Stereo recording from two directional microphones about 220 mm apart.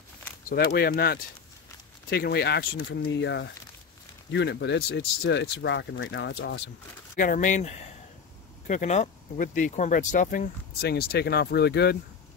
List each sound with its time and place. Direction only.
0.5 s speech: 40° left (ahead or behind)
7.2 s speech: 35° left (ahead or behind)